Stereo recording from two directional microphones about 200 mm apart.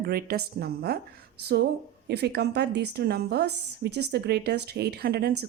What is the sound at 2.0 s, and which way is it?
A woman's voice, 55° right (ahead or behind).